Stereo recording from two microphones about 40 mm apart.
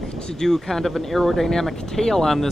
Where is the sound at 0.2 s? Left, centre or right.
Centre.